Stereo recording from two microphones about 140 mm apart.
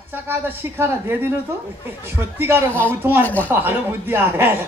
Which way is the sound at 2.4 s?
15° right (ahead or behind).